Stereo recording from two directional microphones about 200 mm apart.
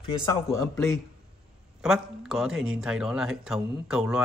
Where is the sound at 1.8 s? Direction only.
5° right (ahead or behind).